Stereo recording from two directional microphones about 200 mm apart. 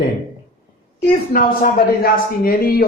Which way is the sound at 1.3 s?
45° left (ahead or behind).